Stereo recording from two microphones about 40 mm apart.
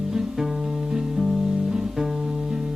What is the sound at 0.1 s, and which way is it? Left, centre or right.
Music, centre.